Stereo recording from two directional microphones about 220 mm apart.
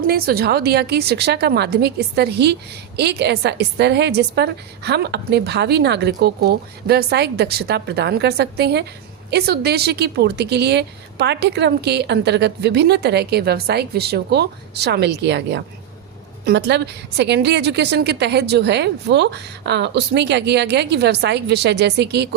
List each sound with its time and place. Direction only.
0.1 s a woman's voice: 45° right (ahead or behind)